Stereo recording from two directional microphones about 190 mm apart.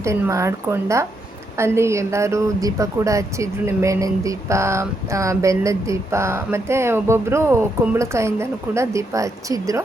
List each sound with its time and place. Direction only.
0.0 s a woman's voice: 15° right (ahead or behind)